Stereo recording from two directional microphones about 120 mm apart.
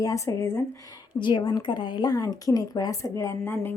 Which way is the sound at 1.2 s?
40° left (ahead or behind).